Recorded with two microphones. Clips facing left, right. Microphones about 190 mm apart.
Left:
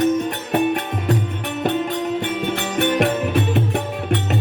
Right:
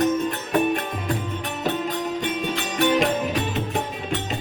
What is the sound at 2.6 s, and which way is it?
Music, 60° left (ahead or behind).